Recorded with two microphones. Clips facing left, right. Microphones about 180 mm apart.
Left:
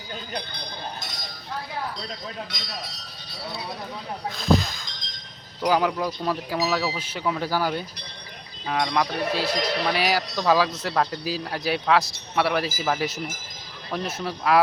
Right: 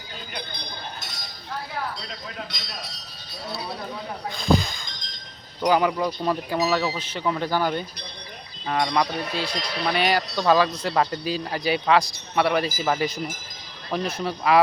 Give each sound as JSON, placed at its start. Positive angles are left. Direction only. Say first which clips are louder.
{"t": 4.3, "sound": "speech", "louder": "even", "side_deg": 0}